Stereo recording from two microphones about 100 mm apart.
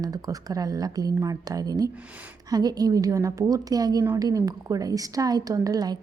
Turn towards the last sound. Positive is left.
turn(degrees=-40)  # may be behind; listen again after turning